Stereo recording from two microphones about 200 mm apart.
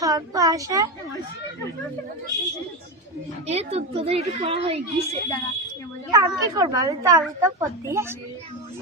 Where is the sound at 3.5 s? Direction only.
30° right (ahead or behind).